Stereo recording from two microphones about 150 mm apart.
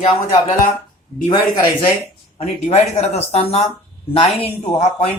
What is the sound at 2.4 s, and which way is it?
A man's voice, 45° left (ahead or behind).